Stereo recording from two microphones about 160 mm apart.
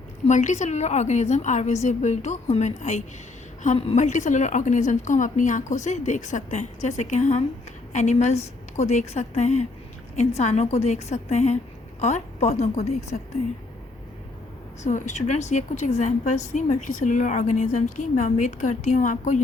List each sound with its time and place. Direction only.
0.3 s a woman's voice: 50° left (ahead or behind)
14.8 s a woman's voice: 50° left (ahead or behind)